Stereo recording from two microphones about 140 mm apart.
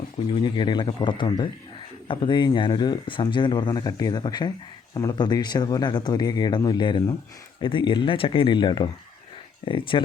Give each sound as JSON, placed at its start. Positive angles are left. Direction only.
{"t": 0.3, "sound": "speech", "side_deg": 35}